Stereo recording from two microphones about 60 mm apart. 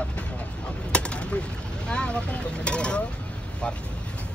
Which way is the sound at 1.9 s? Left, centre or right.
Centre.